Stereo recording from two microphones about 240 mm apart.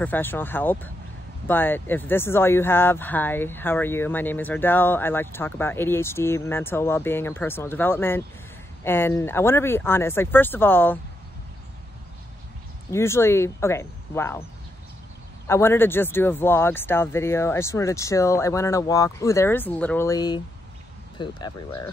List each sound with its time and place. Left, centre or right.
0.0 s speech: centre
12.9 s speech: centre
15.4 s speech: centre